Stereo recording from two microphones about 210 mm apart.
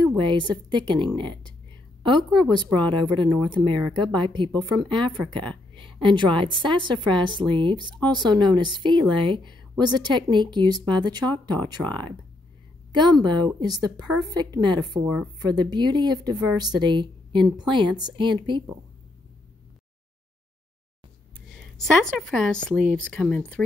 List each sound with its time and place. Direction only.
0.1 s a woman's voice: 20° right (ahead or behind)
2.5 s a woman's voice: 20° right (ahead or behind)
12.9 s a woman's voice: 20° right (ahead or behind)
22.1 s speech: 5° left (ahead or behind)